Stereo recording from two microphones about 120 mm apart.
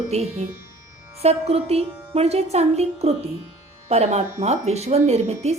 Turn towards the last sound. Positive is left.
turn(degrees=-65)  # may be behind; listen again after turning